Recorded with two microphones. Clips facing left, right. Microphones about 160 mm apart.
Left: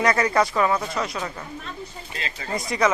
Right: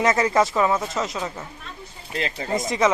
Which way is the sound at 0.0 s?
20° right (ahead or behind).